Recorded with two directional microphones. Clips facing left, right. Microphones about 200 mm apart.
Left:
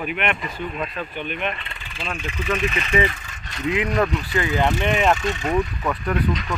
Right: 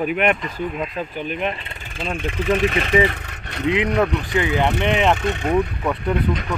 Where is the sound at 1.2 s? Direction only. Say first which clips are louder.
Right 3 dB; 30° right (ahead or behind).